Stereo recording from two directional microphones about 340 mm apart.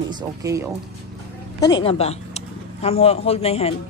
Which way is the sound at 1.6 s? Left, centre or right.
Centre.